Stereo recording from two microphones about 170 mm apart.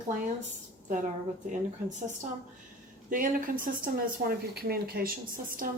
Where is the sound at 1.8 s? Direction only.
45° right (ahead or behind).